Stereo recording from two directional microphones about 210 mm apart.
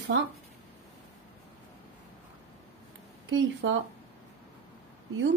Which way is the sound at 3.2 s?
65° right (ahead or behind).